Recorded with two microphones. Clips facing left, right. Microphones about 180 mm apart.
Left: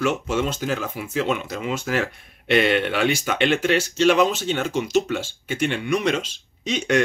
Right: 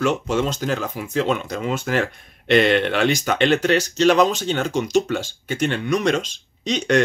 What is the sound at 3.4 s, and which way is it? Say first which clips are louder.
Speech: right 2 dB; 40° right (ahead or behind).